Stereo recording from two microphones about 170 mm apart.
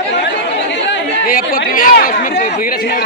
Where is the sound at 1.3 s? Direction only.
55° left (ahead or behind).